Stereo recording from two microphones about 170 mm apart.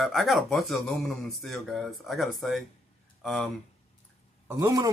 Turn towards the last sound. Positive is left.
turn(degrees=-20)  # may be behind; listen again after turning